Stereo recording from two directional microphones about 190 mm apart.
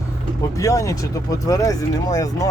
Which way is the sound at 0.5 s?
15° left (ahead or behind).